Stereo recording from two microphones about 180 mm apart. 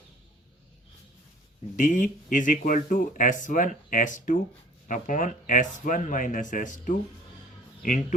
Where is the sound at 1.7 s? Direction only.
45° left (ahead or behind).